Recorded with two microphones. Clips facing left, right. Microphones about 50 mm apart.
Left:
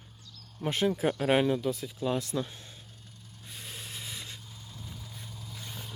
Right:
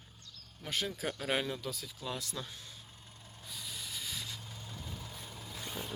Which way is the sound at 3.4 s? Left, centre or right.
Left.